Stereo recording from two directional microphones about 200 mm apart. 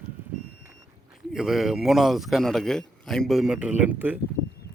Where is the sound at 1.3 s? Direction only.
Centre (ahead or behind).